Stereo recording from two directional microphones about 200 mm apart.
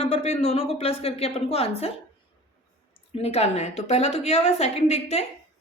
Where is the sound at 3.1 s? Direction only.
30° left (ahead or behind).